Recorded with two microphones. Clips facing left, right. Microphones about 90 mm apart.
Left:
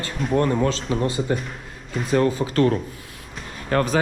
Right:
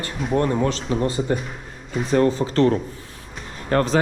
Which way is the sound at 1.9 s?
Centre (ahead or behind).